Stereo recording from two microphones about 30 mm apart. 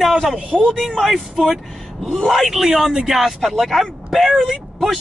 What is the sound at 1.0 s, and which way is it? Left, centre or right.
Speech, centre.